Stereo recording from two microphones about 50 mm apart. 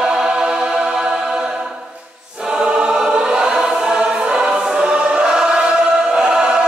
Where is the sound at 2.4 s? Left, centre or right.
Centre.